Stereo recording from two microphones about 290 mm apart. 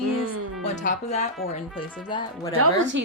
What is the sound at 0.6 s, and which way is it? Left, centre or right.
Speech, left.